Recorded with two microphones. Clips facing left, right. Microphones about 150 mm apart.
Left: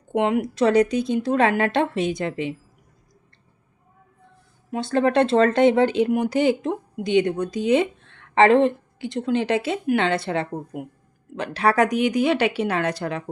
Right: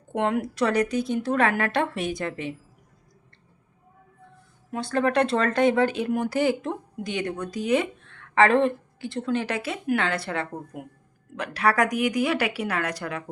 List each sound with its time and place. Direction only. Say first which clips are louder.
0.1 s speech: left 4 dB; 15° left (ahead or behind)
4.7 s speech: left 4 dB; 25° left (ahead or behind)